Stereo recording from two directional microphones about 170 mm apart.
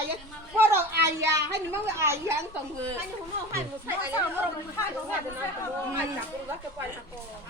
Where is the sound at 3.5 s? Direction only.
10° right (ahead or behind).